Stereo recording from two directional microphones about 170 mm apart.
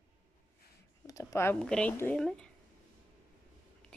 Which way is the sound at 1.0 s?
20° left (ahead or behind).